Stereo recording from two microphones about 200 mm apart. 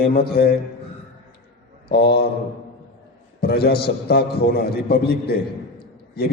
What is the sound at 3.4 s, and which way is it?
A man's voice, 50° left (ahead or behind).